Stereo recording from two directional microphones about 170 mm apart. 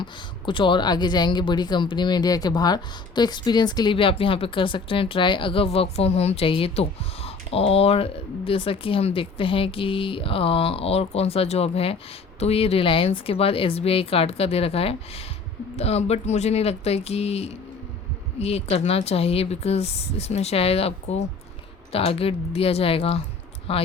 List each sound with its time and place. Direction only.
0.0 s a woman's voice: 30° left (ahead or behind)